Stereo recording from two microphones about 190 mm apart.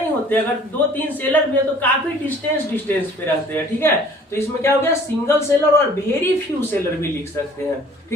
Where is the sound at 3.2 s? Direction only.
10° left (ahead or behind).